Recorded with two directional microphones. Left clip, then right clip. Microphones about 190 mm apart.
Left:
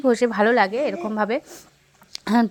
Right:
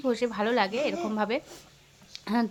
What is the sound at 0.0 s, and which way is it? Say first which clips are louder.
Speech: left 9 dB; 35° left (ahead or behind).